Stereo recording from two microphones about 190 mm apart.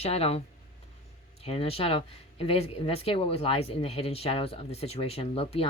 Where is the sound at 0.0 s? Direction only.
30° left (ahead or behind).